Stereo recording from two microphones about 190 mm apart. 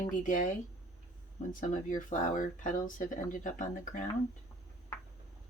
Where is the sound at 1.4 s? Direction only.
40° left (ahead or behind).